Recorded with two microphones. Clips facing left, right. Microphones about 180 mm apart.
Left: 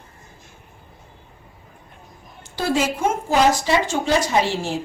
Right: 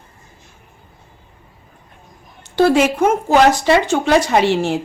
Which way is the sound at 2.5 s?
65° right (ahead or behind).